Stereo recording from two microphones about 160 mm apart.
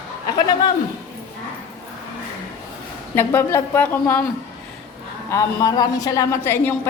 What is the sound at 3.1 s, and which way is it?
A woman's voice, 15° left (ahead or behind).